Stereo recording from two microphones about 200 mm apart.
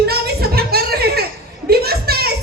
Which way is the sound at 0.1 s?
50° right (ahead or behind).